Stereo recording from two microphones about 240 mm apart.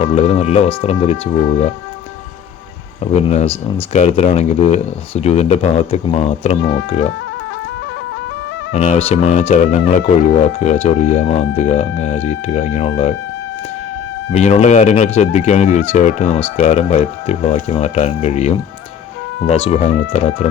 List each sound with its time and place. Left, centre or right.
0.0 s speech: left
3.0 s speech: left
8.7 s speech: left
14.3 s speech: left
19.6 s speech: left